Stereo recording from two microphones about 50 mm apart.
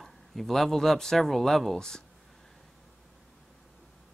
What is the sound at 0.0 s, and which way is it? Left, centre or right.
Speech, centre.